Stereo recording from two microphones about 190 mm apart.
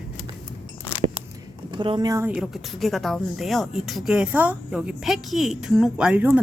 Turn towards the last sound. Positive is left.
turn(degrees=-5)  # may be behind; listen again after turning